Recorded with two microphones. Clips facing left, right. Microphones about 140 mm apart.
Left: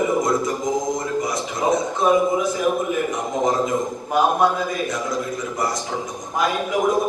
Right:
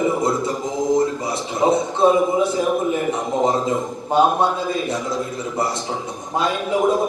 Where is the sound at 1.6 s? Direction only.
30° right (ahead or behind).